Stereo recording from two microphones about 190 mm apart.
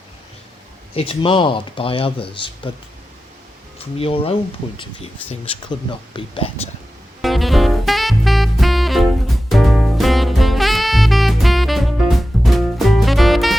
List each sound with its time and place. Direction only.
0.9 s speech: 30° left (ahead or behind)
3.8 s speech: 30° left (ahead or behind)
6.1 s speech: 30° left (ahead or behind)
7.2 s music: centre (ahead or behind)